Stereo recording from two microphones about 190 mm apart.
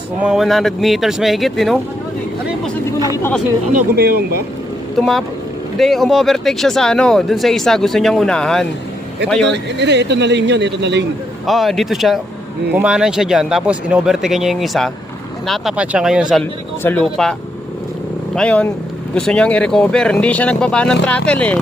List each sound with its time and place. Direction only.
0.2 s speech: 5° right (ahead or behind)
3.9 s speech: 55° right (ahead or behind)
4.9 s speech: centre (ahead or behind)
9.5 s speech: 65° right (ahead or behind)
11.4 s speech: centre (ahead or behind)
18.3 s speech: 5° left (ahead or behind)